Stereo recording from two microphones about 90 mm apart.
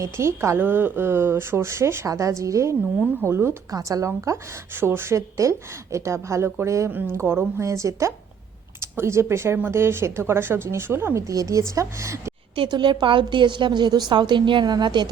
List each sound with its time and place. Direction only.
0.0 s a woman's voice: 30° right (ahead or behind)
12.5 s a woman's voice: 55° right (ahead or behind)